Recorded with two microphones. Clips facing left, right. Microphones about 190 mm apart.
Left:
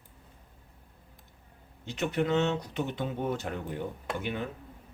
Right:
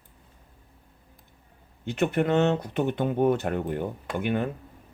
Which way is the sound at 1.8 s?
55° right (ahead or behind).